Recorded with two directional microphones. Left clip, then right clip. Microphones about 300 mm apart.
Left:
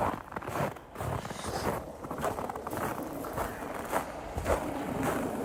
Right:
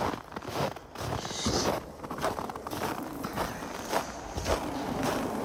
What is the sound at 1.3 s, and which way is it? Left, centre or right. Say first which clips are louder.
Vehicle: right 5 dB; right.